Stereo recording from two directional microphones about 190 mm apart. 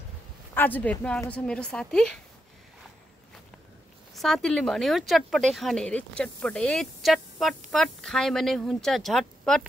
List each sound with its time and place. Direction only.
0.6 s speech: 10° left (ahead or behind)
4.1 s speech: centre (ahead or behind)